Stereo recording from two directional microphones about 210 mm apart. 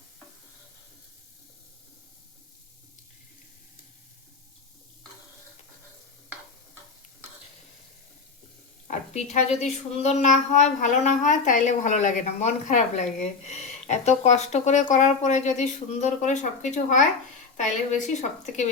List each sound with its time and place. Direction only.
8.9 s speech: 35° left (ahead or behind)